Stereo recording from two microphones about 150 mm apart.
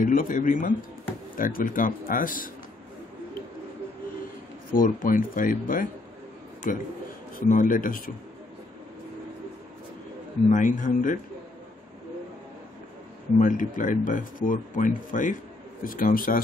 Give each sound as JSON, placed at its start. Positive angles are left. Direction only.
{"t": 0.0, "sound": "speech", "side_deg": 65}
{"t": 4.7, "sound": "speech", "side_deg": 65}
{"t": 10.5, "sound": "speech", "side_deg": 60}
{"t": 13.4, "sound": "speech", "side_deg": 65}